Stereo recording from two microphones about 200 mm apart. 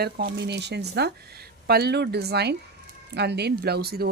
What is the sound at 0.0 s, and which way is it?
Speech, 55° right (ahead or behind).